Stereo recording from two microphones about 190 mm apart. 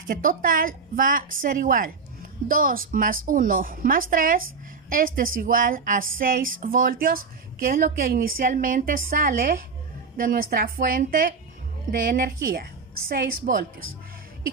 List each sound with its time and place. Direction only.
0.1 s a woman's voice: 45° right (ahead or behind)